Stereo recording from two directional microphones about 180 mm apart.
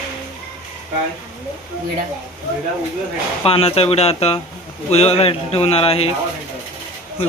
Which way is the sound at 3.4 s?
30° left (ahead or behind).